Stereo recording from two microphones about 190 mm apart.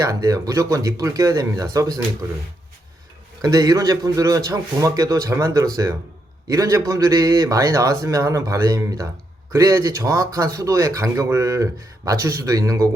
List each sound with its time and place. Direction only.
0.0 s speech: 15° right (ahead or behind)
3.4 s speech: 15° right (ahead or behind)